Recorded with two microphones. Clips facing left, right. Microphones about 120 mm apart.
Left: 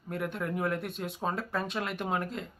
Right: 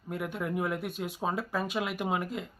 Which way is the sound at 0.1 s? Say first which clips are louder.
Even; 5° right (ahead or behind).